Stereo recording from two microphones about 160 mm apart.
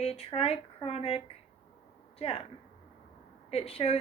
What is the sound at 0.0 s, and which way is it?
A woman's voice, 40° left (ahead or behind).